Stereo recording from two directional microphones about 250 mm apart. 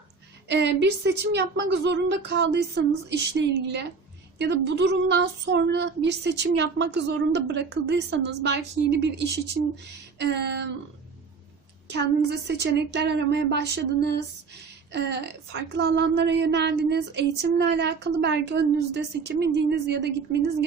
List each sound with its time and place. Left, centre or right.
0.4 s a woman's voice: right
11.9 s a woman's voice: right